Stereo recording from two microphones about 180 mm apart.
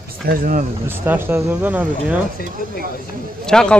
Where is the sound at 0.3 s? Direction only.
55° right (ahead or behind).